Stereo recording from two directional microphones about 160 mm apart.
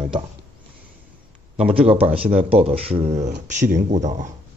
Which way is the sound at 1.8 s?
35° right (ahead or behind).